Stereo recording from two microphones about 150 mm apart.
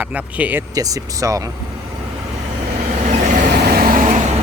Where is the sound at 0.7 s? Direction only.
25° right (ahead or behind).